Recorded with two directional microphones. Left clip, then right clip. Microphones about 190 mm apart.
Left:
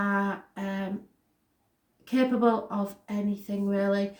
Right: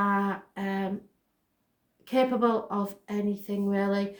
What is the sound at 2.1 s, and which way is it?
Speech, 45° right (ahead or behind).